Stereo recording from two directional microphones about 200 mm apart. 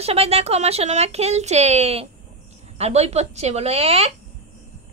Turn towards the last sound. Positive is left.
turn(degrees=-30)  # may be behind; listen again after turning